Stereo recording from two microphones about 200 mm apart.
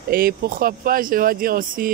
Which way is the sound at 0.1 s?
45° right (ahead or behind).